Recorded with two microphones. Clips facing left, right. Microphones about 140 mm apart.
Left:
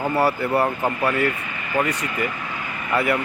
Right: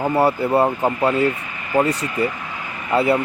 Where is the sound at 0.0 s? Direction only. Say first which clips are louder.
Right 3 dB; 25° right (ahead or behind).